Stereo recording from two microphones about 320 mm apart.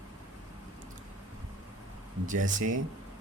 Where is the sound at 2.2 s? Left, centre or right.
Right.